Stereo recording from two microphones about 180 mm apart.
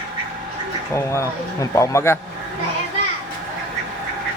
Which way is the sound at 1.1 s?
15° left (ahead or behind).